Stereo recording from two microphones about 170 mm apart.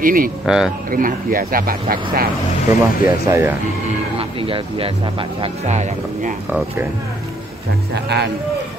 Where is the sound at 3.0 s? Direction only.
15° right (ahead or behind).